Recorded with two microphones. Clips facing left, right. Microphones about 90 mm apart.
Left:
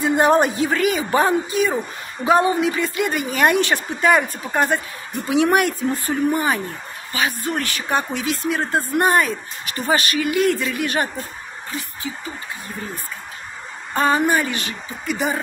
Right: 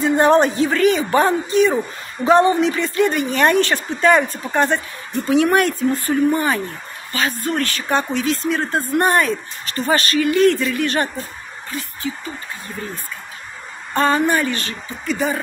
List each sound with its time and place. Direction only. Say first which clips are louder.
0.0 s a woman's voice: right 2 dB; 15° left (ahead or behind)
13.9 s a woman's voice: right 1 dB; 15° left (ahead or behind)